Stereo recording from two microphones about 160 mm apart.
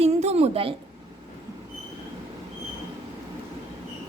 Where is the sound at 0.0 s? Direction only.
40° right (ahead or behind).